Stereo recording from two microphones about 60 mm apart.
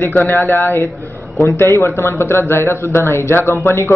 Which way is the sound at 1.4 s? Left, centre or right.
Left.